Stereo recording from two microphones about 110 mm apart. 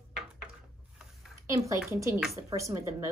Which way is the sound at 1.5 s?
30° right (ahead or behind).